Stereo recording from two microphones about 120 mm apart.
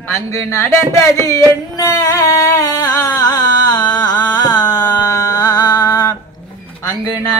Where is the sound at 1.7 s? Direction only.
30° left (ahead or behind).